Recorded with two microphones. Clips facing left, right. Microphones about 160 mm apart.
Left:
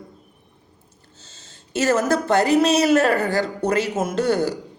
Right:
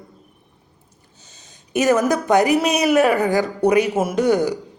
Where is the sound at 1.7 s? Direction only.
15° right (ahead or behind).